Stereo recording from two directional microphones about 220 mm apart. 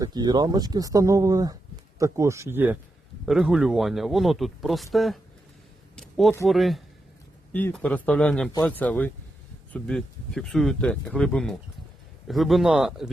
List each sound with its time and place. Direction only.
0.0 s speech: 20° right (ahead or behind); by 5.2 s centre (ahead or behind)
6.0 s a sound: centre (ahead or behind)
6.4 s speech: centre (ahead or behind)